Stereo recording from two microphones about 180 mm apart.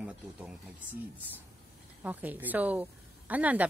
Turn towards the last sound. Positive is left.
turn(degrees=-10)  # may be behind; listen again after turning